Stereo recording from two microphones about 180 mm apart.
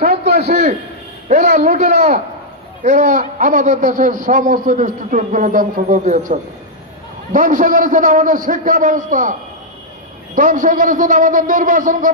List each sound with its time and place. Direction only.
0.4 s a man's voice: 40° right (ahead or behind)